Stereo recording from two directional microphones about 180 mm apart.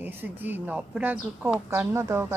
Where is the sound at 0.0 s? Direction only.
10° right (ahead or behind).